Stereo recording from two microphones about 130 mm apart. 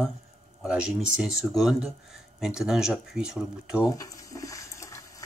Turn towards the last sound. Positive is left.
turn(degrees=25)  # may be behind; listen again after turning